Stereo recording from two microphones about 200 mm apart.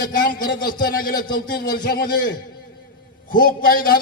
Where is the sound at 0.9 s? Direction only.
45° left (ahead or behind).